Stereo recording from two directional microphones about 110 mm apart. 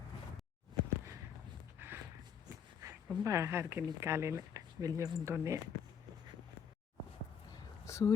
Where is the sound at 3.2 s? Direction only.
25° right (ahead or behind).